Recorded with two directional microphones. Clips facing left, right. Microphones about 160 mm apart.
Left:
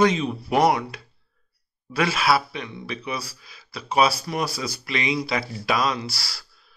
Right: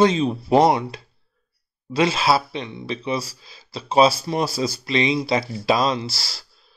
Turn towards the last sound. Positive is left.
turn(degrees=-25)  # may be behind; listen again after turning